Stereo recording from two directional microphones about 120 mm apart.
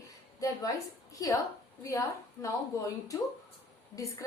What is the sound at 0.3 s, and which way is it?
A woman's voice, 30° left (ahead or behind).